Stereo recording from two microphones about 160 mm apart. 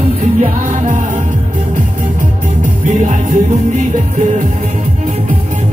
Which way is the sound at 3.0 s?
50° right (ahead or behind).